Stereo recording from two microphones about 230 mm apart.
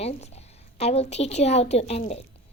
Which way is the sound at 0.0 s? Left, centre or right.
Left.